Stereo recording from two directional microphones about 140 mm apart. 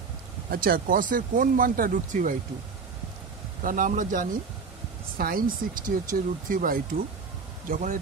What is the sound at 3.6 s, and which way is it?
Speech, 70° right (ahead or behind).